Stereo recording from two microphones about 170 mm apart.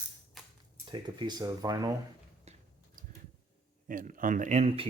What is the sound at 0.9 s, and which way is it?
Speech, 30° right (ahead or behind).